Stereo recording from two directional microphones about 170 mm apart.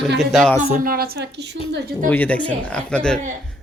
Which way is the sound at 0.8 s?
60° right (ahead or behind).